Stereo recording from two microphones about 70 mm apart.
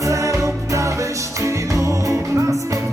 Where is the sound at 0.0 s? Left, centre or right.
Right.